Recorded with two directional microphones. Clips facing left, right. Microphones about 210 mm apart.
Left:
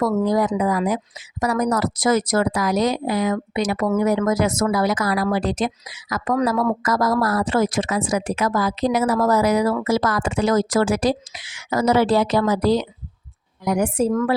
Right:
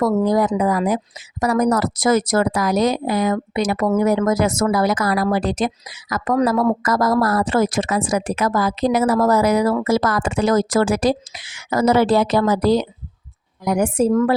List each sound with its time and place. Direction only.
0.0 s speech: 45° right (ahead or behind)